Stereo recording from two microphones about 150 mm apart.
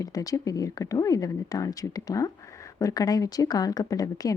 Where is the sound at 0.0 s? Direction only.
25° left (ahead or behind).